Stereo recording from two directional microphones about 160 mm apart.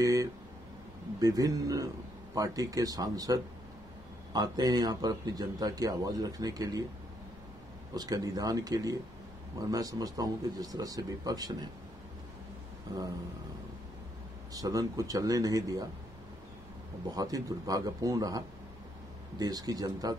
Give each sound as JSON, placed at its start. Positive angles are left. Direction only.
{"t": 0.0, "sound": "a sound", "side_deg": -20}
{"t": 1.2, "sound": "speech", "side_deg": -25}
{"t": 7.9, "sound": "speech", "side_deg": -25}
{"t": 14.5, "sound": "speech", "side_deg": -20}
{"t": 17.1, "sound": "speech", "side_deg": -25}